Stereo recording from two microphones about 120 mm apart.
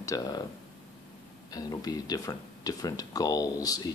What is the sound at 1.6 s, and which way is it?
Speech, 30° left (ahead or behind).